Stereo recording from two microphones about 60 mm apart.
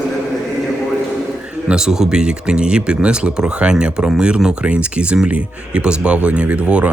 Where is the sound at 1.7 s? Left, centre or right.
Centre.